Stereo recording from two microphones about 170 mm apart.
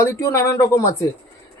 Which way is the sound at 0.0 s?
15° left (ahead or behind).